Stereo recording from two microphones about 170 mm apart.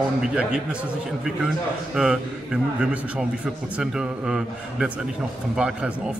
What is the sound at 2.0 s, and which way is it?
A man's voice, 5° right (ahead or behind).